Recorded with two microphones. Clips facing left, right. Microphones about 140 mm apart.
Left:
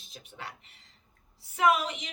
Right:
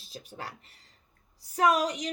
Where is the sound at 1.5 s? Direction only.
40° right (ahead or behind).